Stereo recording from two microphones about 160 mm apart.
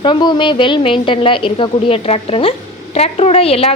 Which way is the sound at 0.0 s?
30° left (ahead or behind).